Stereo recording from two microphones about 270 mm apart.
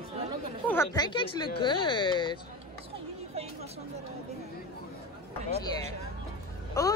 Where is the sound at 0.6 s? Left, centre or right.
Centre.